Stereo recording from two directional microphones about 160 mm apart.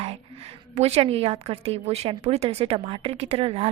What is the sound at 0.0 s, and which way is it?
A woman's voice, 40° right (ahead or behind).